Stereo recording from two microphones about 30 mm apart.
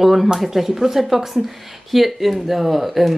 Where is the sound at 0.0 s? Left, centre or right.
Centre.